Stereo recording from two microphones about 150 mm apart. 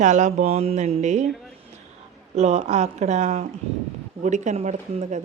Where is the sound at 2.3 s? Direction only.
50° right (ahead or behind).